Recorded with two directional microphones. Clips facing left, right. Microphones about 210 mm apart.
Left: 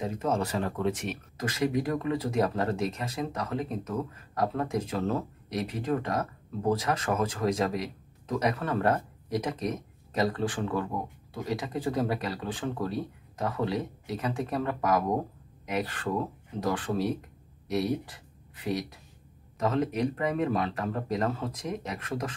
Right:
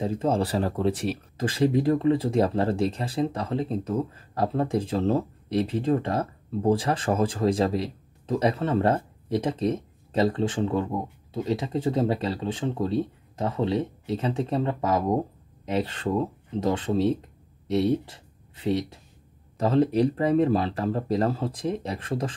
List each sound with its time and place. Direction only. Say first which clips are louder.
0.0 s speech: right 4 dB; 30° right (ahead or behind)